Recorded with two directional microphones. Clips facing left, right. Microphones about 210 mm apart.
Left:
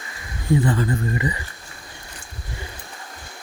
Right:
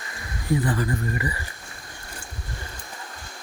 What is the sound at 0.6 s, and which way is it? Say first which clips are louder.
Speech: left 3 dB; 25° left (ahead or behind).